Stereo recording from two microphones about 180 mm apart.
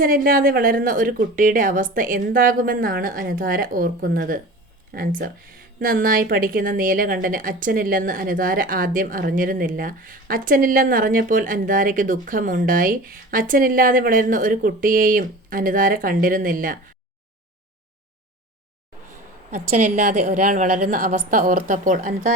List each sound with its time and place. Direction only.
0.0 s a woman's voice: 50° right (ahead or behind)
19.5 s a woman's voice: 40° right (ahead or behind)